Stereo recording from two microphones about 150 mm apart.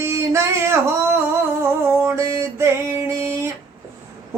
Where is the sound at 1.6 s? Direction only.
20° right (ahead or behind).